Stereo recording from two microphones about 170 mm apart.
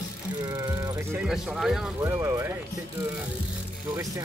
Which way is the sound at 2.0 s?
15° right (ahead or behind).